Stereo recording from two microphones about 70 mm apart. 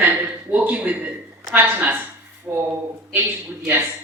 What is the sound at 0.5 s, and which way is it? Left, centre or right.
A man's voice, right.